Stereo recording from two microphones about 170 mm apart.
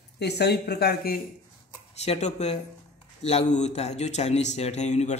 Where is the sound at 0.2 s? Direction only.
75° left (ahead or behind).